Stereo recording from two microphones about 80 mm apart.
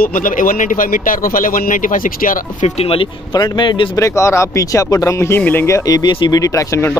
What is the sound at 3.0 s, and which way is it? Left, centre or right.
Speech, left.